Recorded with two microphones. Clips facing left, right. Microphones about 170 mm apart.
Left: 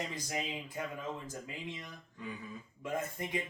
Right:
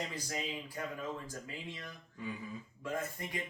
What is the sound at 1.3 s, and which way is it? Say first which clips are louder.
Speech: left 2 dB; 20° left (ahead or behind).